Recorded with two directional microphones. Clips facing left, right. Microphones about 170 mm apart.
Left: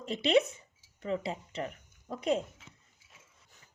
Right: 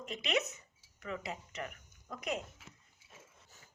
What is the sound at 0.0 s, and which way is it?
Speech, 30° left (ahead or behind).